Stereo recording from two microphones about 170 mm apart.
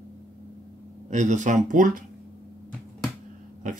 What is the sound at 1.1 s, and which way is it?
Speech, 45° right (ahead or behind).